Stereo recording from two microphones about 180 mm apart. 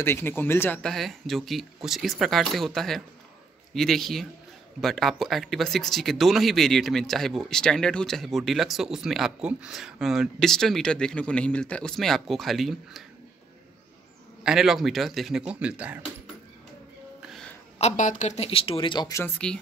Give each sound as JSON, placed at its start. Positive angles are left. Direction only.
{"t": 0.0, "sound": "speech", "side_deg": 10}
{"t": 14.4, "sound": "speech", "side_deg": 0}
{"t": 17.3, "sound": "a sound", "side_deg": 5}
{"t": 17.7, "sound": "speech", "side_deg": 40}